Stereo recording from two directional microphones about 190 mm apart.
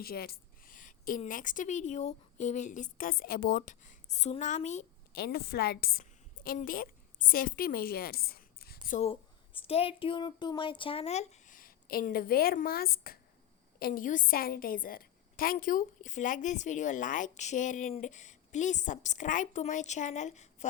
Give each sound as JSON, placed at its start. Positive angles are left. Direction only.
{"t": 0.0, "sound": "a woman's voice", "side_deg": 50}
{"t": 5.1, "sound": "a woman's voice", "side_deg": 55}
{"t": 9.0, "sound": "a woman's voice", "side_deg": 30}